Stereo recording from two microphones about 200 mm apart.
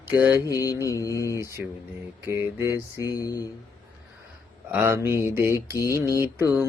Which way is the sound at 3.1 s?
20° left (ahead or behind).